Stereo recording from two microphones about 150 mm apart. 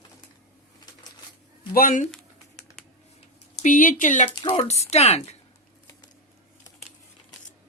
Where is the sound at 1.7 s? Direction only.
60° left (ahead or behind).